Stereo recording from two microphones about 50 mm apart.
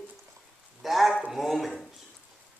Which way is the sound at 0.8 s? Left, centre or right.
Centre.